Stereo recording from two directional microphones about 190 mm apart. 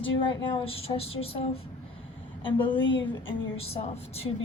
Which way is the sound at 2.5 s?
25° left (ahead or behind).